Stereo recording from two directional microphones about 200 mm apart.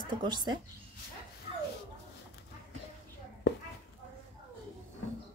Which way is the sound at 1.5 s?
30° right (ahead or behind).